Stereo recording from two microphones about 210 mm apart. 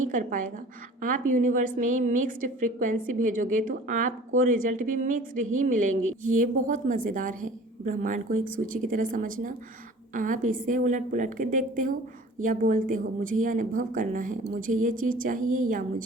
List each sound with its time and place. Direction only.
0.1 s a woman's voice: 40° right (ahead or behind)
6.0 s speech: 75° right (ahead or behind)
6.3 s a woman's voice: 40° right (ahead or behind)